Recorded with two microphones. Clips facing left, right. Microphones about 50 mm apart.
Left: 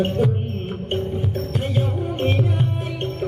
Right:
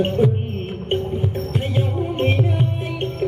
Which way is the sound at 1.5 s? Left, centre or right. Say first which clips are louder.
Right 1 dB; centre.